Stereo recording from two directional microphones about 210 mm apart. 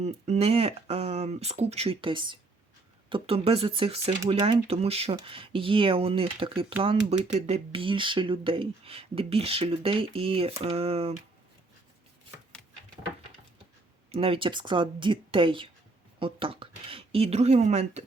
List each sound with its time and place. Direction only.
0.0 s speech: 30° right (ahead or behind)
14.1 s speech: 25° right (ahead or behind)